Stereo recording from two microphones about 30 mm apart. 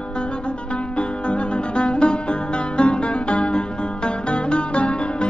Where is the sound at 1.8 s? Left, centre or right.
Left.